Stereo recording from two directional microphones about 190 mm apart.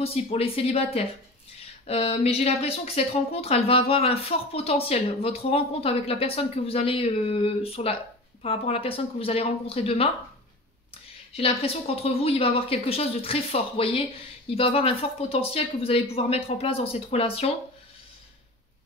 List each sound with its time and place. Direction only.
0.0 s speech: 30° left (ahead or behind)
11.3 s speech: 30° left (ahead or behind)